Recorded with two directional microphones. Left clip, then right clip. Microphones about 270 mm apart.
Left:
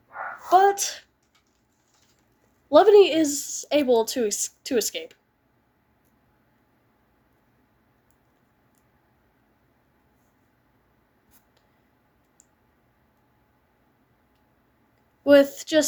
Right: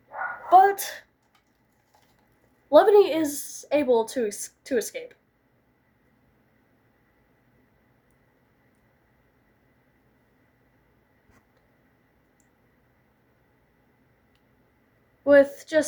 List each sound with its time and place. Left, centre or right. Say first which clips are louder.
0.4 s a sound: right 1 dB; left
2.6 s a woman's voice: left 2 dB; left
15.2 s a woman's voice: left 1 dB; left